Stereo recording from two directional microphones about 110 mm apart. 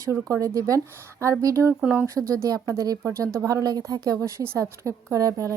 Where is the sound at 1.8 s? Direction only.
10° right (ahead or behind).